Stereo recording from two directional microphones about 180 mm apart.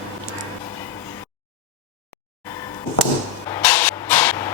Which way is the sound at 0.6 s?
25° left (ahead or behind).